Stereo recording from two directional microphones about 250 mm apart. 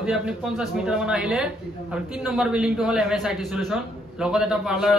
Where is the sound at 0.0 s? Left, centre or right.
Centre.